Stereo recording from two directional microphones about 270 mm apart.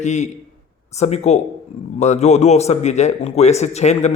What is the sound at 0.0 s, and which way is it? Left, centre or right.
A man's voice, left.